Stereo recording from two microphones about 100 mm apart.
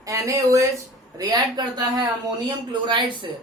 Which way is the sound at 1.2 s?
45° right (ahead or behind).